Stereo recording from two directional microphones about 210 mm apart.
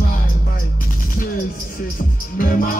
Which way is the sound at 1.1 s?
40° left (ahead or behind).